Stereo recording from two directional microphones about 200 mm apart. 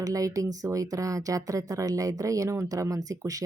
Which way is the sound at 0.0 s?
15° right (ahead or behind).